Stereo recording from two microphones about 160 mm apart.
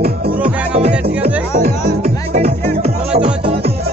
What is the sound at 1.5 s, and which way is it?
Music, 70° right (ahead or behind).